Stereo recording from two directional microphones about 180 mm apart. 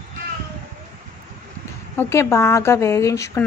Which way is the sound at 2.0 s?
15° left (ahead or behind).